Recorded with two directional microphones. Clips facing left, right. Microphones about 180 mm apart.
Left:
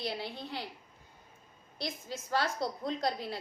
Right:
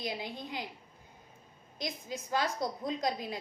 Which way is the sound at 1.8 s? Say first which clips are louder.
Right 1 dB; 15° right (ahead or behind).